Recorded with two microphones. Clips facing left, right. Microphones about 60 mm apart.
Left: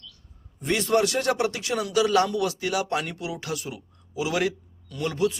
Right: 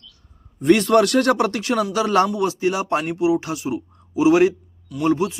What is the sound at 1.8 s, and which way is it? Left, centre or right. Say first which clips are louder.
Speech: right 2 dB; right.